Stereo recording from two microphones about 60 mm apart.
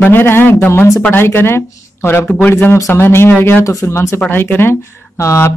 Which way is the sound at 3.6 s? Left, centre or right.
Left.